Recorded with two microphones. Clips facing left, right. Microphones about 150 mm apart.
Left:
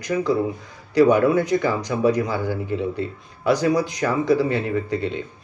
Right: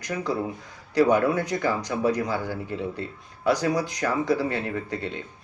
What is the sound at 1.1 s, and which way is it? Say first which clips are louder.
A man's voice: left 5 dB; 25° left (ahead or behind).